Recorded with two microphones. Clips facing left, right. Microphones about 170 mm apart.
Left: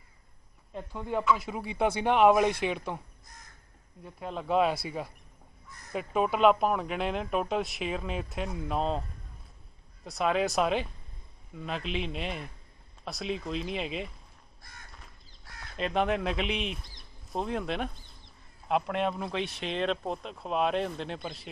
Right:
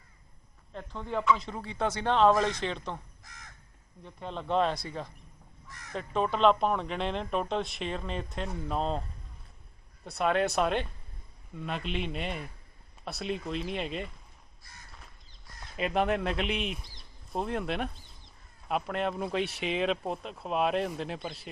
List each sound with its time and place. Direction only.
0.7 s speech: 10° left (ahead or behind)
3.3 s crow: 90° right
4.0 s speech: 5° left (ahead or behind)
5.7 s crow: 90° right
5.9 s speech: 10° left (ahead or behind)
10.0 s speech: centre (ahead or behind)
14.6 s crow: 55° left (ahead or behind)
15.7 s speech: 5° right (ahead or behind)